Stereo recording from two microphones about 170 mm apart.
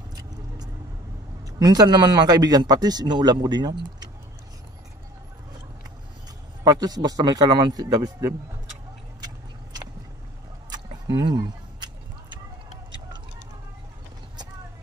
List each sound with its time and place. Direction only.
1.4 s speech: 25° right (ahead or behind)
6.6 s speech: 25° right (ahead or behind)
9.2 s a sound: 25° right (ahead or behind)